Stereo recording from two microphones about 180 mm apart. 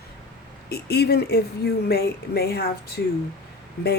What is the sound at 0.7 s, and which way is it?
A woman's voice, 65° left (ahead or behind).